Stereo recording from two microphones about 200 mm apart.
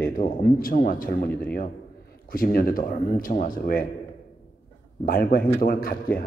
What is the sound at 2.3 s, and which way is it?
A man's voice, 45° left (ahead or behind).